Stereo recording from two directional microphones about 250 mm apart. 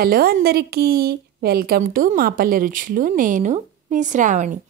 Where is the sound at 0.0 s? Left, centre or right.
Right.